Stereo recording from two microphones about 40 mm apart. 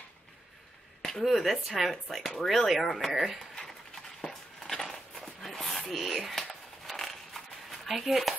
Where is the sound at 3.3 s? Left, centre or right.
Centre.